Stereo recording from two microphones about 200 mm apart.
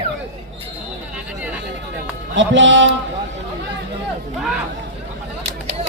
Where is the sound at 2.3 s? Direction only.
65° right (ahead or behind).